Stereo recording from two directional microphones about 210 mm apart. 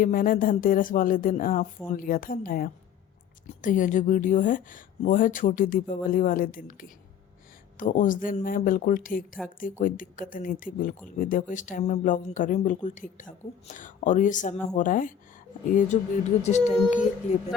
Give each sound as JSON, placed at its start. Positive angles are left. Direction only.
{"t": 0.0, "sound": "a woman's voice", "side_deg": 40}